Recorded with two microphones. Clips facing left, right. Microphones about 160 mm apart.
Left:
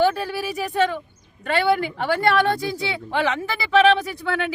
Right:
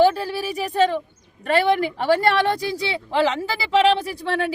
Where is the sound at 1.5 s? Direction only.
35° right (ahead or behind).